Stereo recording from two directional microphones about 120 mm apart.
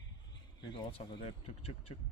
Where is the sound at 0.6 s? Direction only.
45° left (ahead or behind).